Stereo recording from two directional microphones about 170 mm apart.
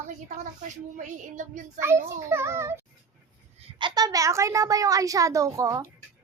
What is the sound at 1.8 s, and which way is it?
A child's voice, 15° right (ahead or behind).